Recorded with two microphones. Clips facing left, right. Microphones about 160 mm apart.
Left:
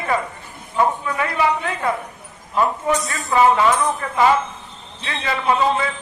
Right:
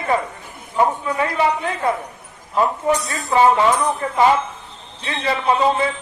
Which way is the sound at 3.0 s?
30° right (ahead or behind).